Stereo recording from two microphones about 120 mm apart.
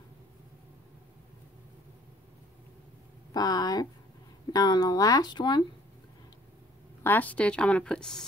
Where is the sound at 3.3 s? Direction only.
30° left (ahead or behind).